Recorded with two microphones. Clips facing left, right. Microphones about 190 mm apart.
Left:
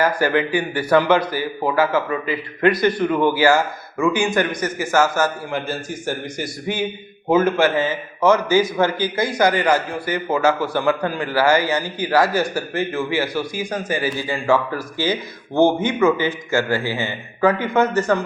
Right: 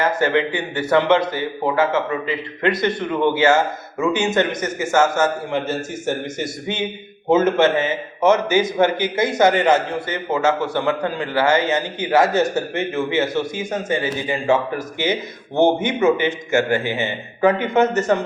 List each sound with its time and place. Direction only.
0.0 s a man's voice: 25° right (ahead or behind)